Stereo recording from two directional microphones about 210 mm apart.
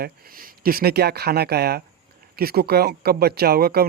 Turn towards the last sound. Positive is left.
turn(degrees=-45)  # may be behind; listen again after turning